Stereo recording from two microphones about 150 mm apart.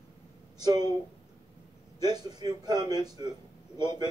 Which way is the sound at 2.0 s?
25° right (ahead or behind).